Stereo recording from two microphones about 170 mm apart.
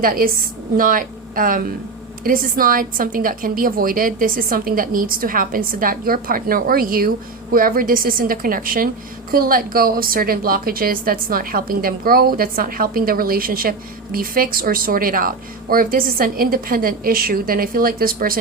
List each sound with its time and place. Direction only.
0.0 s a woman's voice: 55° right (ahead or behind)